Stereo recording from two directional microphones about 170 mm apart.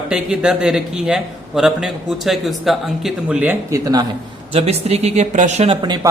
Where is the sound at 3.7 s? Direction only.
20° right (ahead or behind).